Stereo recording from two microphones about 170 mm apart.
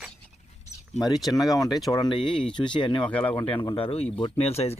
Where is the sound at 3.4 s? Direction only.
35° left (ahead or behind).